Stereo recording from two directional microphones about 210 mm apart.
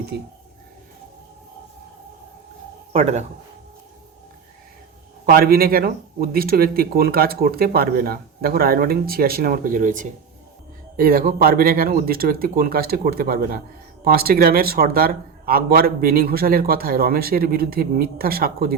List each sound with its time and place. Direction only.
0.1 s speech: 50° right (ahead or behind)
2.9 s speech: 30° right (ahead or behind)
5.3 s speech: 45° right (ahead or behind)